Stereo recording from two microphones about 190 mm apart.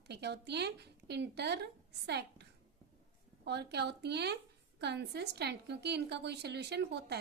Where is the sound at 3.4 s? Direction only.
60° right (ahead or behind).